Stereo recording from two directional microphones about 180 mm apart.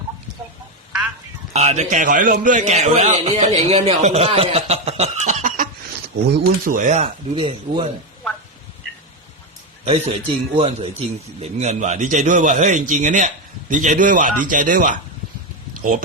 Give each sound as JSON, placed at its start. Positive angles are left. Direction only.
{"t": 1.5, "sound": "a man's voice", "side_deg": -40}
{"t": 9.8, "sound": "a man's voice", "side_deg": -30}